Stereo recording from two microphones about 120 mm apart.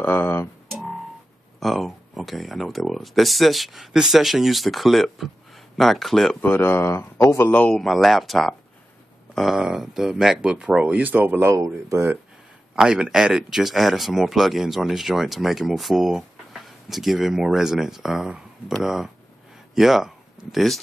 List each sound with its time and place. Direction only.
0.0 s a sound: 15° left (ahead or behind)
0.7 s music: centre (ahead or behind)
1.6 s speech: centre (ahead or behind)
6.4 s speech: 15° left (ahead or behind); by 12.2 s 25° right (ahead or behind)
12.7 s speech: 5° right (ahead or behind)